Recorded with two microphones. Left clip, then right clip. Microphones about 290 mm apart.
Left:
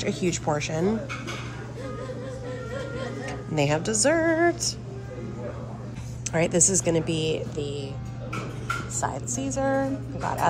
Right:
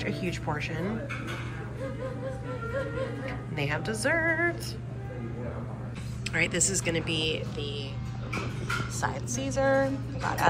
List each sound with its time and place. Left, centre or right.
0.0 s speech: centre
3.3 s speech: centre
6.3 s speech: centre
9.0 s speech: centre